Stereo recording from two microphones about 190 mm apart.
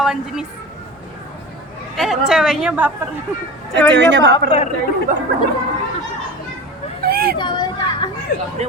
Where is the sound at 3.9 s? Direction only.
65° right (ahead or behind).